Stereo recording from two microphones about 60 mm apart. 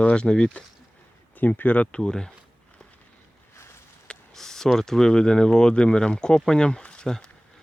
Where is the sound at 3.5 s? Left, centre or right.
Left.